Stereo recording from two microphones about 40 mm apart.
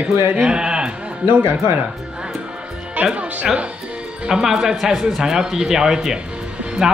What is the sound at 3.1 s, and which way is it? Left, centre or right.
Speech, right.